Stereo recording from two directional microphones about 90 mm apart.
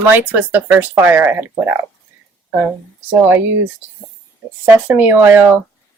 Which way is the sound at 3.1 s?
25° right (ahead or behind).